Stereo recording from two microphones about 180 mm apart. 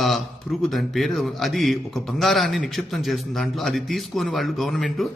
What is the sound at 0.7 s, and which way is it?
A man's voice, centre (ahead or behind).